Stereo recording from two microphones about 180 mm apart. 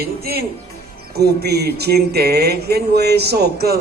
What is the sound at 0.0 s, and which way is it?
Music, 60° right (ahead or behind).